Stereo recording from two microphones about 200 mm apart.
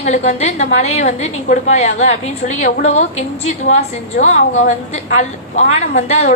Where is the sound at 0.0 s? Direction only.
35° left (ahead or behind).